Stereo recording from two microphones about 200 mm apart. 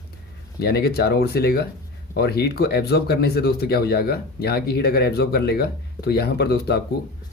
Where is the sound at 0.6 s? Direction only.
55° left (ahead or behind).